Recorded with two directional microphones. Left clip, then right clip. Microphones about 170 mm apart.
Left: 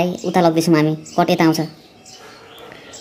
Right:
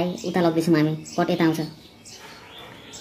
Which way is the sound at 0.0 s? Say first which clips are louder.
Left 7 dB; 25° left (ahead or behind).